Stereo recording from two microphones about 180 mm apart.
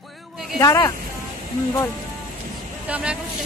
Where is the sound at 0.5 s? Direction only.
20° left (ahead or behind).